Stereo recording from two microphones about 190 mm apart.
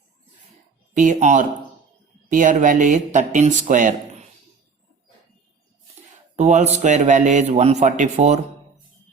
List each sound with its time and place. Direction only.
0.9 s a man's voice: 40° right (ahead or behind)
6.3 s a man's voice: 35° right (ahead or behind)